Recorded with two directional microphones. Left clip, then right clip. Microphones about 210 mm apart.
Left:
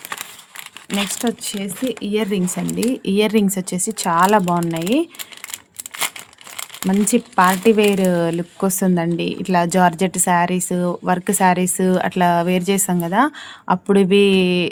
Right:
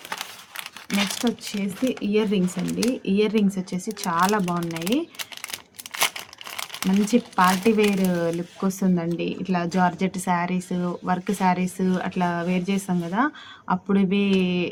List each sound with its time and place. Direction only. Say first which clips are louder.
1.2 s speech: left 4 dB; 45° left (ahead or behind)
6.8 s speech: left 4 dB; 50° left (ahead or behind)